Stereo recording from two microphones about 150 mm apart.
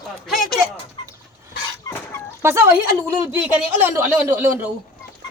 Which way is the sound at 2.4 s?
15° right (ahead or behind).